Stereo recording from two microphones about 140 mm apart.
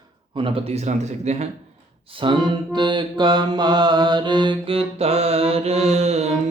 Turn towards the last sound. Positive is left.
turn(degrees=-50)  # may be behind; listen again after turning